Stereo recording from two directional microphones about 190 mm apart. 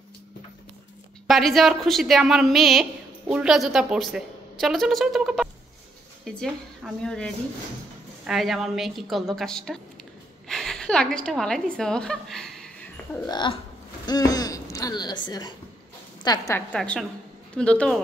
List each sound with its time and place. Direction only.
1.2 s a woman's voice: centre (ahead or behind)
13.3 s a woman's voice: 25° left (ahead or behind)
16.7 s a woman's voice: 5° left (ahead or behind)